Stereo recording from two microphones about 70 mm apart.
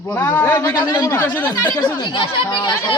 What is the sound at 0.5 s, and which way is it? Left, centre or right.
Speech, left.